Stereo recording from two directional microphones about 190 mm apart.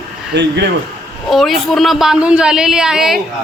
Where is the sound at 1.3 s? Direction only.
Centre (ahead or behind).